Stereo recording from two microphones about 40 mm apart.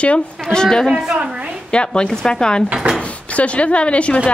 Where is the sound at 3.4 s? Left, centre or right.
Left.